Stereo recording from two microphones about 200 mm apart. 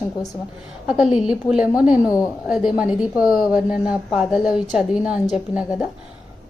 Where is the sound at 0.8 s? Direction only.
5° right (ahead or behind).